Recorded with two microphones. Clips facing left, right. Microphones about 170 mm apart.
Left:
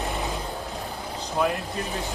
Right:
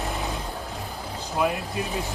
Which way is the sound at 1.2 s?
Centre (ahead or behind).